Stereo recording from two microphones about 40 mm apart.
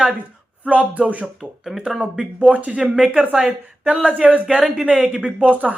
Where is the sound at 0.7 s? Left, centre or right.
Right.